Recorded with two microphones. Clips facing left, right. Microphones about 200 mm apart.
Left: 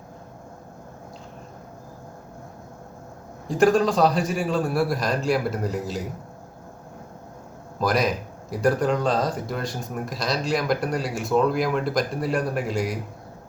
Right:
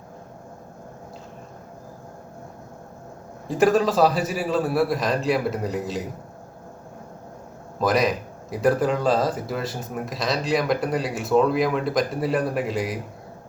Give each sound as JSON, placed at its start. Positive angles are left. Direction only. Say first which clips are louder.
{"t": 3.4, "sound": "speech", "louder": "even", "side_deg": 0}
{"t": 7.8, "sound": "speech", "louder": "right 2 dB", "side_deg": 0}